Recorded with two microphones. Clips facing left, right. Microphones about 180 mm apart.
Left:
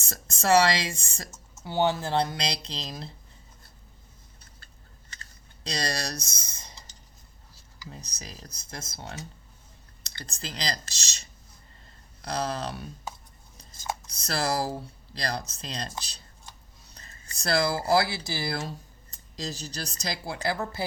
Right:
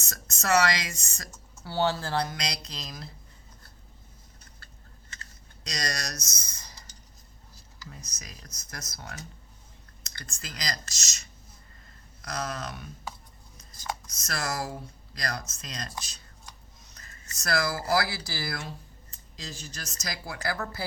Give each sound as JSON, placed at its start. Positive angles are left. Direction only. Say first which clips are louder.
{"t": 0.0, "sound": "speech", "louder": "left 5 dB", "side_deg": 30}
{"t": 5.6, "sound": "speech", "louder": "left 4 dB", "side_deg": 30}
{"t": 7.9, "sound": "speech", "louder": "left 4 dB", "side_deg": 30}
{"t": 13.6, "sound": "a sound", "louder": "left 2 dB", "side_deg": 30}
{"t": 18.3, "sound": "speech", "louder": "left 4 dB", "side_deg": 20}
{"t": 19.1, "sound": "speech", "louder": "left 7 dB", "side_deg": 35}